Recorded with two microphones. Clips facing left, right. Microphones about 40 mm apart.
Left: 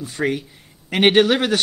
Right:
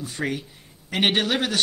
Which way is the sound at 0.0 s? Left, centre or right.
Left.